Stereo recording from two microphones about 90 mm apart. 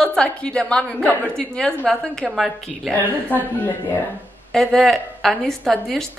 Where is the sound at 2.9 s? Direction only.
20° left (ahead or behind).